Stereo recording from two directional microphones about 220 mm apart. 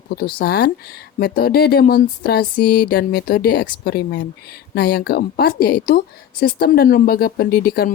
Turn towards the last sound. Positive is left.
turn(degrees=45)  # may be behind; listen again after turning